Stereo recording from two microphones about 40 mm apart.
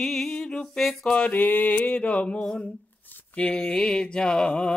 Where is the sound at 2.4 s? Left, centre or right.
Centre.